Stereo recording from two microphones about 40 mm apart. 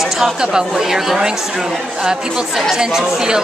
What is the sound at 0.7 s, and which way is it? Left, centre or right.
Speech, centre.